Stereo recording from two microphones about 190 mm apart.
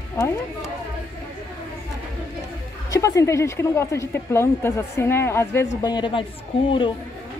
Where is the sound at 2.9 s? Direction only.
15° left (ahead or behind).